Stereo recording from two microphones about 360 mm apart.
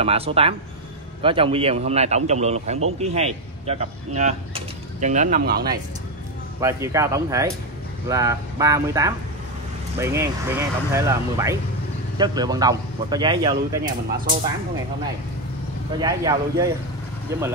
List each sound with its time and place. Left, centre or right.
0.0 s a man's voice: centre
6.6 s a man's voice: centre
16.0 s a man's voice: centre